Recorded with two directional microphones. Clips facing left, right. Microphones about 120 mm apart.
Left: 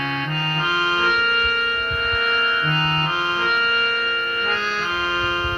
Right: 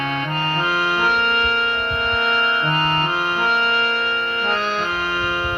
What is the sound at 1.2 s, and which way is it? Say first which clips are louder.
Music: right 2 dB; 30° right (ahead or behind).